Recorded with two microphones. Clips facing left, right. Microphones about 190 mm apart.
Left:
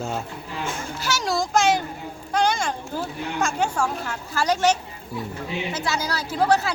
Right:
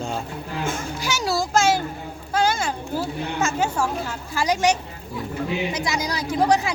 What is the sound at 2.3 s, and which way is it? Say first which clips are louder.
A woman's voice: even; 5° right (ahead or behind).